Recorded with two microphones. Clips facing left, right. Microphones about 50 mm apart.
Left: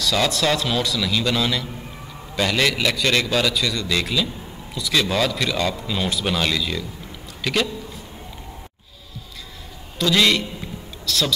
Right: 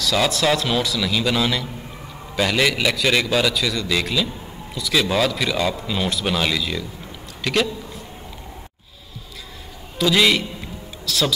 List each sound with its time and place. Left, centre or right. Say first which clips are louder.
0.0 s a man's voice: right 1 dB; centre
9.9 s a man's voice: right 1 dB; centre